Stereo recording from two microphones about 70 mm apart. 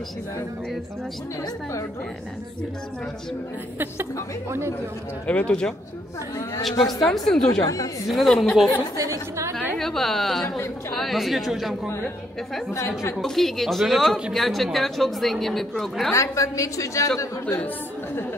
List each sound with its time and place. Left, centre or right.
3.7 s a woman's voice: right
5.2 s speech: centre
7.1 s a woman's voice: centre
7.6 s speech: left
8.1 s a woman's voice: centre
9.8 s a woman's voice: centre
12.7 s a woman's voice: left
13.2 s a woman's voice: centre
16.1 s a woman's voice: left